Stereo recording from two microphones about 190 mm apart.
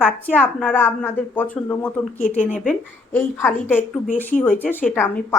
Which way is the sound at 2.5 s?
45° left (ahead or behind).